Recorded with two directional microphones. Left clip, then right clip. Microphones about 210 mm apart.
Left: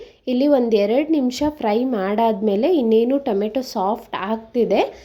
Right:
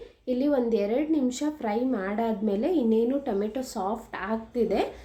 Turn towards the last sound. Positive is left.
turn(degrees=35)  # may be behind; listen again after turning